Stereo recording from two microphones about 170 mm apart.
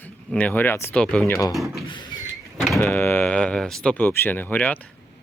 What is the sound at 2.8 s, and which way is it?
Speech, 10° left (ahead or behind).